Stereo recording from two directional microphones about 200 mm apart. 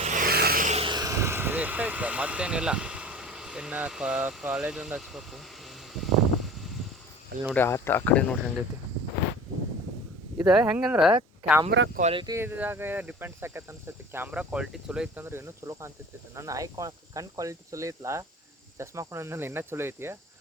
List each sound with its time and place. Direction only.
0.0 s vehicle: 40° right (ahead or behind); by 6.7 s centre (ahead or behind)
7.5 s speech: 10° left (ahead or behind)
10.3 s speech: 5° right (ahead or behind)
11.9 s speech: 35° right (ahead or behind)
12.2 s speech: 15° right (ahead or behind)